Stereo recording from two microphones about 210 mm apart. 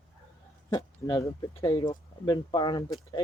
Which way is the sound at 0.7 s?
20° left (ahead or behind).